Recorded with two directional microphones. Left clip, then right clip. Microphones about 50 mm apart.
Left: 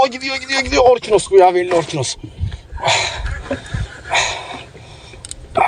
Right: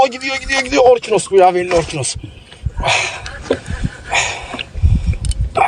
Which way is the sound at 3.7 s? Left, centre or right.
Centre.